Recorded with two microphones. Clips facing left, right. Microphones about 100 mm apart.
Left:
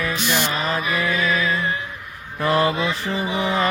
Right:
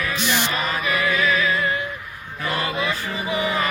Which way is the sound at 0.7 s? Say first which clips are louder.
Even; 30° left (ahead or behind).